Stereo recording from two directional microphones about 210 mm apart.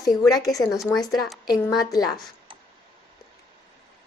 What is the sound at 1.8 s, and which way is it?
Speech, 15° left (ahead or behind).